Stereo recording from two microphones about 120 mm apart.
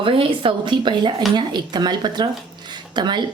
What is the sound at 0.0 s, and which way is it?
Speech, 45° right (ahead or behind).